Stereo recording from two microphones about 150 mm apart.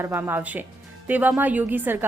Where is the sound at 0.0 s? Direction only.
15° right (ahead or behind).